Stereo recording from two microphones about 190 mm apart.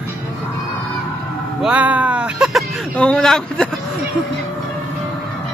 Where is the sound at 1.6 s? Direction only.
5° right (ahead or behind).